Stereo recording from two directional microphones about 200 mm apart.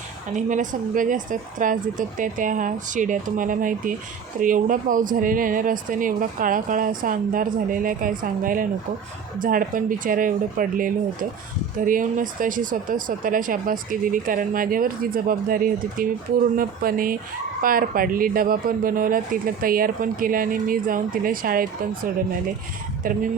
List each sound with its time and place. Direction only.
0.3 s speech: 40° right (ahead or behind)
23.0 s speech: 45° right (ahead or behind)